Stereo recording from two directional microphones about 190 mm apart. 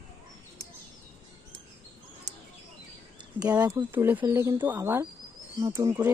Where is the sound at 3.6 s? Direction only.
15° right (ahead or behind).